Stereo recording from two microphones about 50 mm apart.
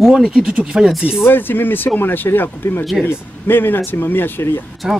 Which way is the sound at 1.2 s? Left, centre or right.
Left.